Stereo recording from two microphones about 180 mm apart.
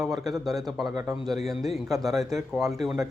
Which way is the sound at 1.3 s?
Centre (ahead or behind).